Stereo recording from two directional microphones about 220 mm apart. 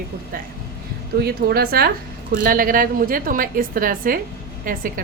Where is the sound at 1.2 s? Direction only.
45° right (ahead or behind).